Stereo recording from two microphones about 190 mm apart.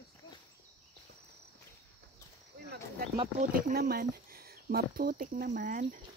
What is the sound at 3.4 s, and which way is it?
Speech, 45° right (ahead or behind).